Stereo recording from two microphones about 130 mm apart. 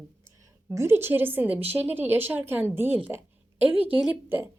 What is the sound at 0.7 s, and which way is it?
A woman's voice, 20° right (ahead or behind).